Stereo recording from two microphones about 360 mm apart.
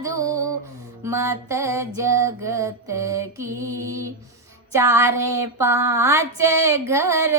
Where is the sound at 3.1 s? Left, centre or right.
Right.